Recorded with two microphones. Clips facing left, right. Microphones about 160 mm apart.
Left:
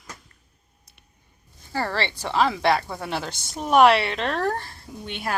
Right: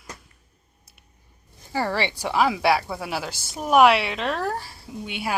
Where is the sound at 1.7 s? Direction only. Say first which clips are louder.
Right 2 dB; 15° right (ahead or behind).